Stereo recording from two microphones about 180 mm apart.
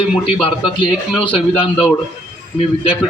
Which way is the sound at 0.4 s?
25° left (ahead or behind).